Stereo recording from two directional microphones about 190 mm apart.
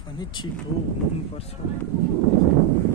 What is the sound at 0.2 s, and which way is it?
Speech, 25° left (ahead or behind).